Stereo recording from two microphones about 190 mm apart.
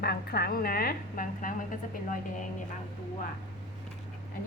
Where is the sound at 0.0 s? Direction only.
55° left (ahead or behind).